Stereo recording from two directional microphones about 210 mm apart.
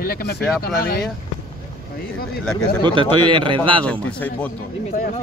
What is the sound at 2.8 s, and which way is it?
A man's voice, 20° right (ahead or behind).